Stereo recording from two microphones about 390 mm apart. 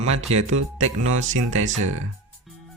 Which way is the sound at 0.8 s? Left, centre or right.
Right.